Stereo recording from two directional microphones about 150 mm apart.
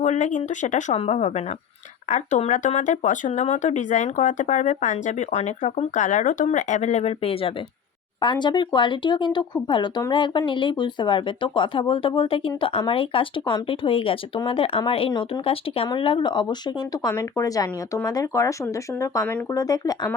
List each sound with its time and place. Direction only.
0.0 s speech: 50° left (ahead or behind); by 20.1 s 25° left (ahead or behind)